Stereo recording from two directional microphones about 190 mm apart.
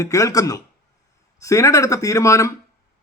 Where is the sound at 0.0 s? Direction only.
15° left (ahead or behind).